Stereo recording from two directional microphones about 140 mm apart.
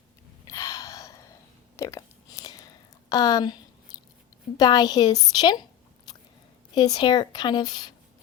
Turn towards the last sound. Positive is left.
turn(degrees=30)  # may be behind; listen again after turning